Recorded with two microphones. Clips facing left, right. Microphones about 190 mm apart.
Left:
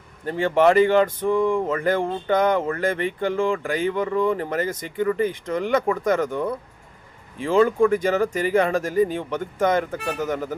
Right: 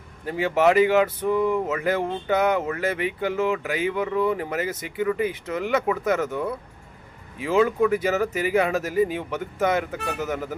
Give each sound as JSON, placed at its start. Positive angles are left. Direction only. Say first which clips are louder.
{"t": 0.3, "sound": "speech", "louder": "left 2 dB", "side_deg": -5}